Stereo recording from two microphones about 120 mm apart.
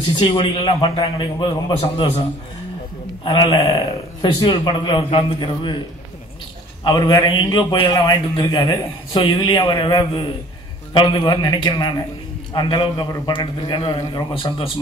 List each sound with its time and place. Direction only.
0.2 s a man's voice: 40° left (ahead or behind)
2.0 s a man's voice: 55° left (ahead or behind)
3.3 s a man's voice: 40° left (ahead or behind)
6.8 s a man's voice: 35° left (ahead or behind)